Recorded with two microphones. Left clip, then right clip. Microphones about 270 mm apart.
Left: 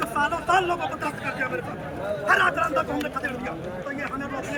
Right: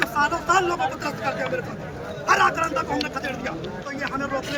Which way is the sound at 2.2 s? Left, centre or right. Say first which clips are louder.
Right 2 dB; centre.